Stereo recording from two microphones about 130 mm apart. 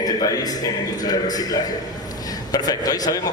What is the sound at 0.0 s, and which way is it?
A man's voice, 30° left (ahead or behind).